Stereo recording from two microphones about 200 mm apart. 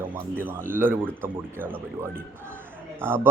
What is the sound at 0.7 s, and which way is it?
Speech, 10° right (ahead or behind).